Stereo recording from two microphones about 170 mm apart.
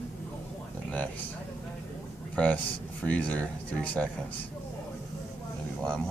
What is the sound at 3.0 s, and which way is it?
Speech, 10° left (ahead or behind).